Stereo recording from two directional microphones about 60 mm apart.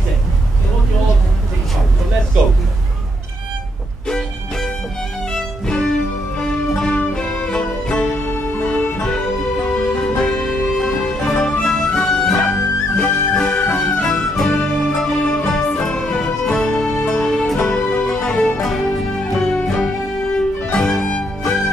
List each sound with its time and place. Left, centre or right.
5.3 s music: centre
8.1 s music: left
9.7 s music: centre
12.4 s music: centre
14.5 s music: centre